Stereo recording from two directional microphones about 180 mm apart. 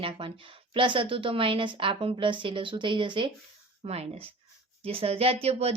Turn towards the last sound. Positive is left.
turn(degrees=-35)  # may be behind; listen again after turning